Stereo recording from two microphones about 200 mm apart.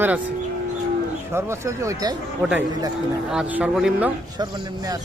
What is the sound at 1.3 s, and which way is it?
Speech, 15° right (ahead or behind).